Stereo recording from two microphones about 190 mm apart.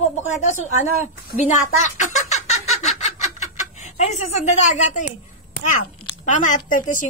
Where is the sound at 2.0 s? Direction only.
40° left (ahead or behind).